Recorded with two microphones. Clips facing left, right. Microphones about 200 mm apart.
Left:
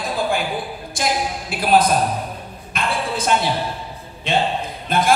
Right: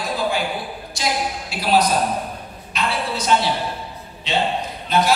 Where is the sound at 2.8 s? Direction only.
50° left (ahead or behind).